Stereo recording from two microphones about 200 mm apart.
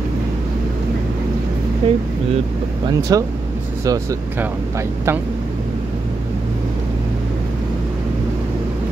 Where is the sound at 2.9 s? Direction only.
15° right (ahead or behind).